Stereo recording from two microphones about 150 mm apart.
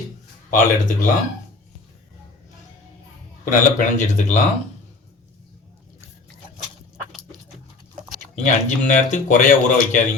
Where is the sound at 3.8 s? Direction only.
60° left (ahead or behind).